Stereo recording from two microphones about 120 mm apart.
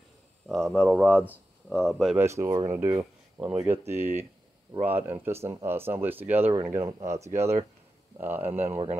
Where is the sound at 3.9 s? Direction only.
20° right (ahead or behind).